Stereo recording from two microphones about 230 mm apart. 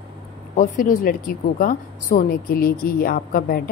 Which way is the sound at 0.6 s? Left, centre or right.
Left.